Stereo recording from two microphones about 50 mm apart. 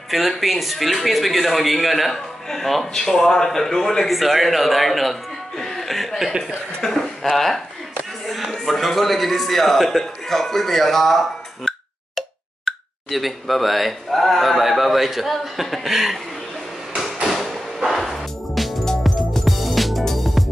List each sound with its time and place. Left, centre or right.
0.1 s speech: centre
12.2 s speech: centre
16.9 s a sound: centre
17.3 s music: centre